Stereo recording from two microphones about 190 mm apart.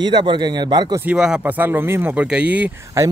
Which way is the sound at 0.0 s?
25° right (ahead or behind).